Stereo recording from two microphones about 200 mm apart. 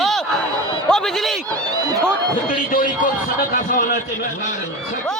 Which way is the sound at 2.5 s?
45° left (ahead or behind).